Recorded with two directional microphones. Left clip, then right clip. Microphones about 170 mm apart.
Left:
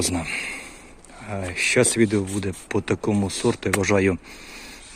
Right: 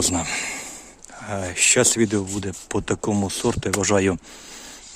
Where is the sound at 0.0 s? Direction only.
30° right (ahead or behind).